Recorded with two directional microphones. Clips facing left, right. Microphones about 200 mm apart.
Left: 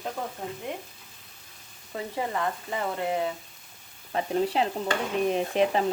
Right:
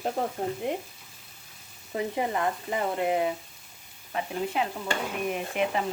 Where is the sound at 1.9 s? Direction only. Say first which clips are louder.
Right 2 dB; 20° right (ahead or behind).